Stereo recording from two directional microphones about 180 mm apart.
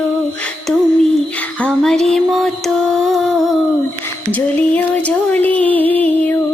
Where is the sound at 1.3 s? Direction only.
10° left (ahead or behind).